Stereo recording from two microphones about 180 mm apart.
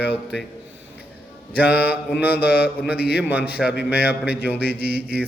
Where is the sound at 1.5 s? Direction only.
10° right (ahead or behind).